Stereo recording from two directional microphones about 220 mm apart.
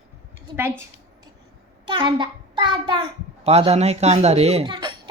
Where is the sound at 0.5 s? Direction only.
10° right (ahead or behind).